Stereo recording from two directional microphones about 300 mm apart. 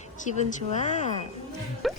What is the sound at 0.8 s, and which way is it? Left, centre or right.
Speech, left.